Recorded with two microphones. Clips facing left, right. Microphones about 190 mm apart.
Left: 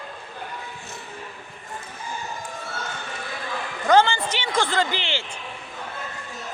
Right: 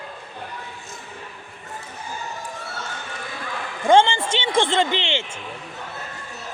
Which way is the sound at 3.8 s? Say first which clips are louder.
Right 2 dB; 25° right (ahead or behind).